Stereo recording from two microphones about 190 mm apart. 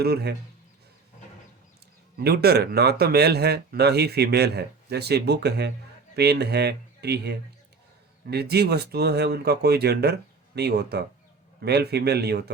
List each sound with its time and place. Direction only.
0.0 s speech: 60° right (ahead or behind)
2.1 s speech: 55° right (ahead or behind)